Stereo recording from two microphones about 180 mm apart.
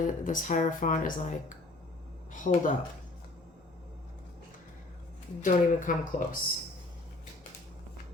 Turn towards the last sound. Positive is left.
turn(degrees=45)  # may be behind; listen again after turning